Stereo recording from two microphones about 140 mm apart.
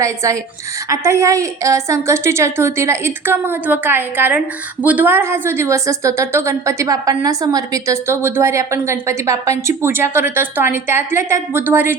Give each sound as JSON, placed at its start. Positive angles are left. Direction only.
{"t": 0.0, "sound": "a woman's voice", "side_deg": -25}